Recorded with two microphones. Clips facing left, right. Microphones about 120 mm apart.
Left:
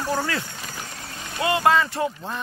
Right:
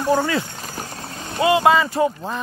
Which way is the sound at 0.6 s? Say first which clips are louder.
Right 4 dB; 35° right (ahead or behind).